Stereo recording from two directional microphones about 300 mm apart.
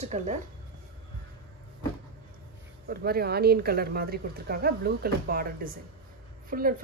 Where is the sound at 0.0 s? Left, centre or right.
Right.